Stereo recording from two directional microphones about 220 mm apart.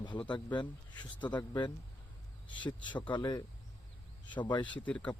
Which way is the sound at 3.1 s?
20° left (ahead or behind).